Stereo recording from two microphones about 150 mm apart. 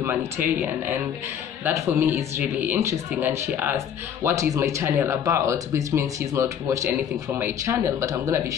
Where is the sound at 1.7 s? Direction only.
15° right (ahead or behind).